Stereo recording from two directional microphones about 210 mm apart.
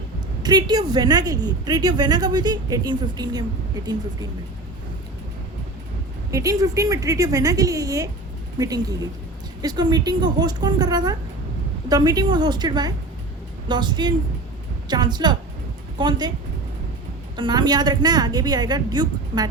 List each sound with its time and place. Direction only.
0.4 s a woman's voice: 20° right (ahead or behind)
6.3 s a woman's voice: 15° right (ahead or behind)
17.3 s a woman's voice: 20° right (ahead or behind)